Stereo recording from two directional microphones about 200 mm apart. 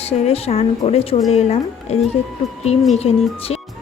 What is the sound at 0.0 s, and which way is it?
A woman's voice, 30° left (ahead or behind).